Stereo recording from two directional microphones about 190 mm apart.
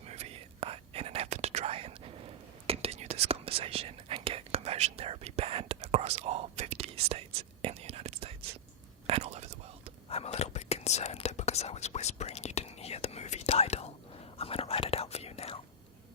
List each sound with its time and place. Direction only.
0.0 s whispering: 35° right (ahead or behind)
10.1 s whispering: 35° left (ahead or behind)